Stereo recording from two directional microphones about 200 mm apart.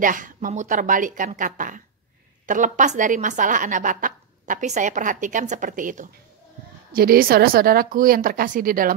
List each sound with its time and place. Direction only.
0.0 s a woman's voice: 40° right (ahead or behind)